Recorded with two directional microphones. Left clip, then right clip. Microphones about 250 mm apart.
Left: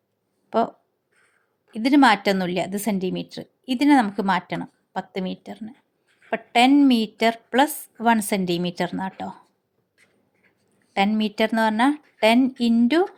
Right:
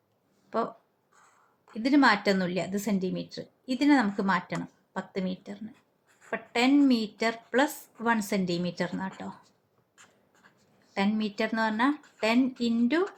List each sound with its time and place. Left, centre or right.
0.5 s speech: left
1.7 s a woman's voice: left
10.9 s a woman's voice: left